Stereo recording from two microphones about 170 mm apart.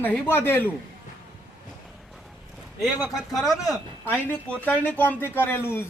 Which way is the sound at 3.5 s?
20° left (ahead or behind).